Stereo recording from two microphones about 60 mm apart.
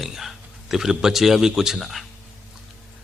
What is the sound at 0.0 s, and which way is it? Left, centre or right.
Speech, centre.